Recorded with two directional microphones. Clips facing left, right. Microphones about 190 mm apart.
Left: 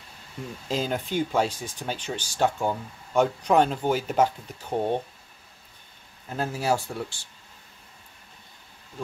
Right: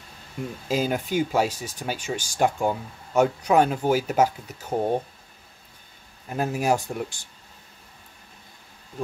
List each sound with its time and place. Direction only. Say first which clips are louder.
0.7 s speech: right 3 dB; 10° right (ahead or behind)
6.2 s speech: right 3 dB; 15° right (ahead or behind)